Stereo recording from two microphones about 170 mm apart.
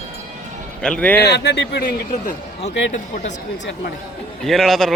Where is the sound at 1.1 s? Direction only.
75° left (ahead or behind).